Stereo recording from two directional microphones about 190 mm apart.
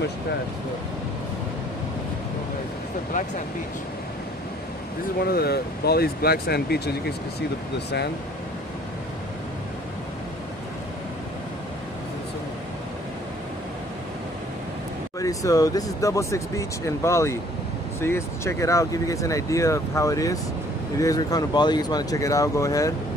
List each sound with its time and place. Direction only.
5.2 s speech: 55° left (ahead or behind)
15.1 s speech: 20° left (ahead or behind)